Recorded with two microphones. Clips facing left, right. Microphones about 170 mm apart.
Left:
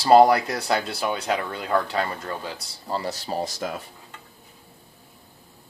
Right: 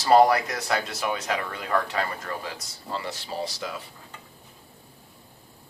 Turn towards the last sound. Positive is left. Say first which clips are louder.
# left 3 dB
turn(degrees=50)  # may be behind; listen again after turning